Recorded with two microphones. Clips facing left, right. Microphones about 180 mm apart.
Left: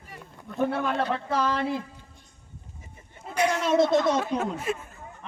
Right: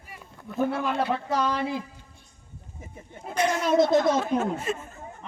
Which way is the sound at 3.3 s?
10° left (ahead or behind).